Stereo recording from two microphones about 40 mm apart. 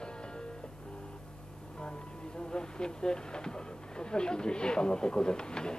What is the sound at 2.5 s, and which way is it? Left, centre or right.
Speech, left.